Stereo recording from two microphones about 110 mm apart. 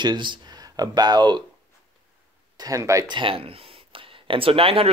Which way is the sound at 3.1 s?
50° right (ahead or behind).